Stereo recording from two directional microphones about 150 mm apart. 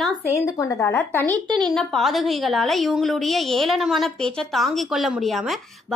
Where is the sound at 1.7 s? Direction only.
Centre (ahead or behind).